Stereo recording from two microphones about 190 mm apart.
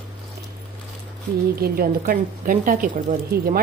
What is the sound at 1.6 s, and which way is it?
A woman's voice, 50° right (ahead or behind).